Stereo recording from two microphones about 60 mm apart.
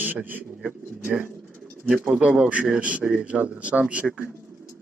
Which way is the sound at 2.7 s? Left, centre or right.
Right.